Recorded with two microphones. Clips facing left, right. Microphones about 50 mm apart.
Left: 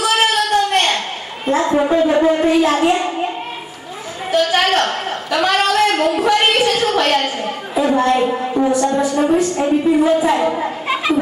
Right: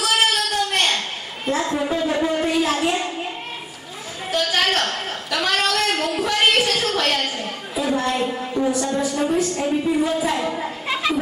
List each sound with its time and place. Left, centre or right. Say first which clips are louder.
0.0 s a sound: left 4 dB; centre
1.8 s shofar: left 8 dB; left
2.7 s child singing: left 6 dB; centre
4.3 s a sound: left 6 dB; centre
8.7 s a woman's voice: left 6 dB; centre
9.1 s a woman's voice: left 6 dB; centre
10.8 s children playing: left 4 dB; left